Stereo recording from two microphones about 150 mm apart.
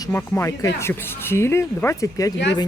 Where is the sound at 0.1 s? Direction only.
10° left (ahead or behind).